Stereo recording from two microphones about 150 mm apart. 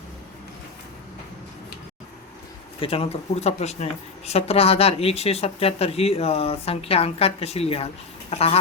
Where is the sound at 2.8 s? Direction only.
40° left (ahead or behind).